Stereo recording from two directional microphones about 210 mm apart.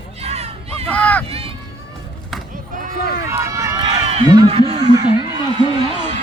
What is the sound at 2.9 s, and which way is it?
Speech, 45° left (ahead or behind).